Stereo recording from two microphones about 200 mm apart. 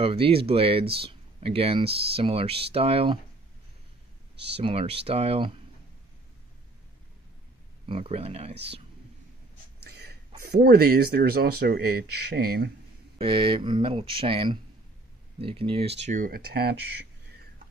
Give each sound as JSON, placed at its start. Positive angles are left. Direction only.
{"t": 0.0, "sound": "speech", "side_deg": -30}
{"t": 4.6, "sound": "speech", "side_deg": -30}
{"t": 7.9, "sound": "speech", "side_deg": -30}
{"t": 9.8, "sound": "speech", "side_deg": -50}
{"t": 13.2, "sound": "speech", "side_deg": -25}
{"t": 16.1, "sound": "speech", "side_deg": -45}